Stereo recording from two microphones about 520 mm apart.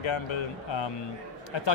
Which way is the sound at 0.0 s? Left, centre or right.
Left.